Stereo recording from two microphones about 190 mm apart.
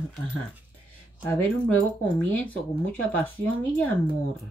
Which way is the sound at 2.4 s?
10° left (ahead or behind).